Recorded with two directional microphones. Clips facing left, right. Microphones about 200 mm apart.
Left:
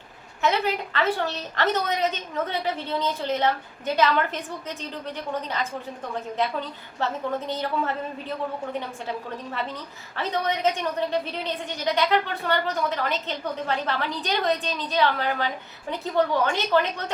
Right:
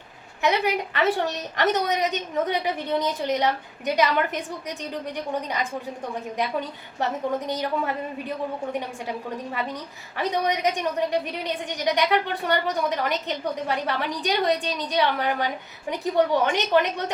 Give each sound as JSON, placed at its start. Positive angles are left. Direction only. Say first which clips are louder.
{"t": 0.4, "sound": "a woman's voice", "louder": "right 1 dB", "side_deg": -15}
{"t": 9.0, "sound": "a woman's voice", "louder": "right 1 dB", "side_deg": -15}